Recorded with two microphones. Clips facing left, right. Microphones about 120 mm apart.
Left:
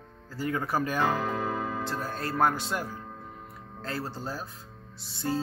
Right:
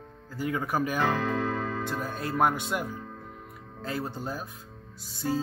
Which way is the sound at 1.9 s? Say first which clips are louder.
Right 1 dB; 15° right (ahead or behind).